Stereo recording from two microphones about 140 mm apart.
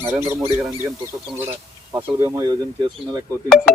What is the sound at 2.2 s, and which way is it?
Speech, 30° right (ahead or behind).